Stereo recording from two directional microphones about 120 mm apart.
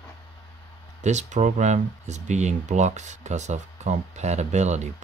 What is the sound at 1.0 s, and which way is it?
Speech, 75° right (ahead or behind).